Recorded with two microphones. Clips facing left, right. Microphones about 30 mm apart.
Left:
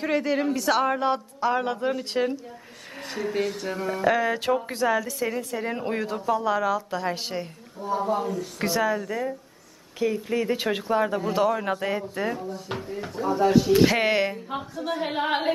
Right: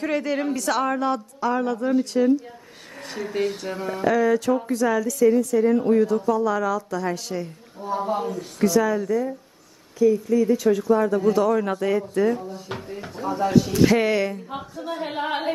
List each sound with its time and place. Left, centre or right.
0.0 s a woman's voice: centre
3.1 s speech: centre
4.1 s a woman's voice: left
6.1 s a woman's voice: left
7.8 s speech: centre
8.5 s a woman's voice: left
9.9 s speech: left
11.1 s a woman's voice: left
12.4 s speech: centre
13.8 s a woman's voice: left
14.5 s a woman's voice: centre